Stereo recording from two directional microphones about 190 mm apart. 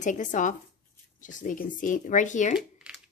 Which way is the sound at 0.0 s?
40° left (ahead or behind).